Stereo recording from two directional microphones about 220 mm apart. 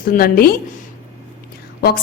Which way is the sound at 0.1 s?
40° left (ahead or behind).